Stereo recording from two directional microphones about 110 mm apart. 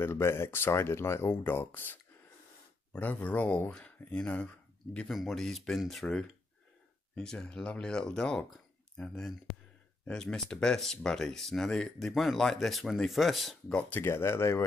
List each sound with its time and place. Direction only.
0.0 s speech: 20° left (ahead or behind)